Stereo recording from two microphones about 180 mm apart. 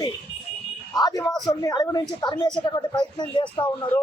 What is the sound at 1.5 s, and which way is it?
A man's voice, 20° left (ahead or behind).